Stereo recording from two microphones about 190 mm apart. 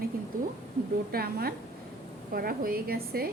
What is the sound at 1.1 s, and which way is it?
A woman's voice, 55° right (ahead or behind).